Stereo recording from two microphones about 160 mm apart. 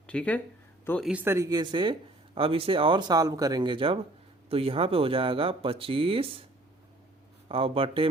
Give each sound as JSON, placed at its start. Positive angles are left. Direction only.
{"t": 0.1, "sound": "speech", "side_deg": 10}
{"t": 1.0, "sound": "speech", "side_deg": -10}
{"t": 7.4, "sound": "a man's voice", "side_deg": -35}